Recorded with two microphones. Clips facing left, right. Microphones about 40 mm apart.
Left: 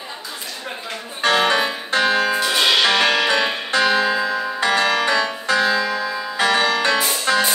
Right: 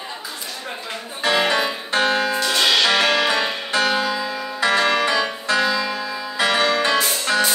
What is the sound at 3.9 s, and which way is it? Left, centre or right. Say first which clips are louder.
Music: left 3 dB; left.